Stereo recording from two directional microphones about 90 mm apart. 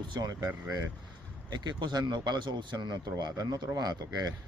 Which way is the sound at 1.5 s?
55° right (ahead or behind).